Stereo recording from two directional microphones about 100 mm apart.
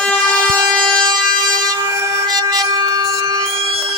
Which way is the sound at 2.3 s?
40° right (ahead or behind).